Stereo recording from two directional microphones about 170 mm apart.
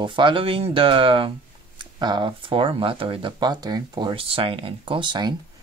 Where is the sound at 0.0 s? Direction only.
30° right (ahead or behind).